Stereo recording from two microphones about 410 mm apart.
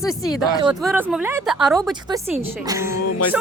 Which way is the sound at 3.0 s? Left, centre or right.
Left.